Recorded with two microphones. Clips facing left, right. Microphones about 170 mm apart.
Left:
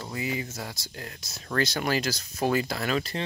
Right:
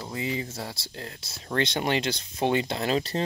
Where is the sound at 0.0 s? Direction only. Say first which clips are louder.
Right 1 dB; 25° right (ahead or behind).